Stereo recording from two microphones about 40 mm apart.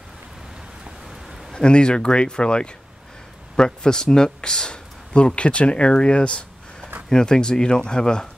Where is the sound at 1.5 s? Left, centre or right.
Left.